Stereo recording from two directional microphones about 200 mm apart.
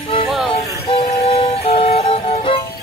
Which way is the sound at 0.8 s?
30° left (ahead or behind).